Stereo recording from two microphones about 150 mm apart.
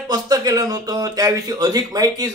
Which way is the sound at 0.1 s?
25° right (ahead or behind).